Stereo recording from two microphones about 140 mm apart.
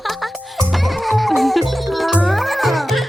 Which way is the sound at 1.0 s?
Centre (ahead or behind).